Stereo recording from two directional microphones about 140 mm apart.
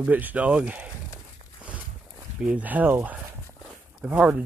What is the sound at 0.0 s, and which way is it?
Speech, 10° right (ahead or behind).